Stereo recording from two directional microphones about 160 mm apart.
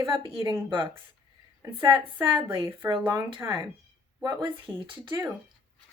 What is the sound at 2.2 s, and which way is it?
Speech, 30° right (ahead or behind).